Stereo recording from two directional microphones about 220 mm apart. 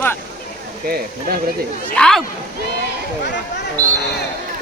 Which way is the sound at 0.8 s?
45° right (ahead or behind).